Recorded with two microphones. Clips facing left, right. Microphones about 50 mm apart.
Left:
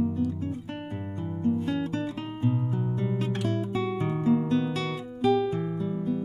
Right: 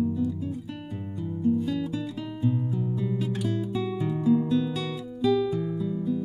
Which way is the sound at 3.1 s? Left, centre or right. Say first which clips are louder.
Even; left.